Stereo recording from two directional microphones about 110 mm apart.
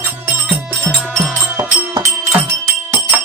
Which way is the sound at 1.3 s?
20° right (ahead or behind).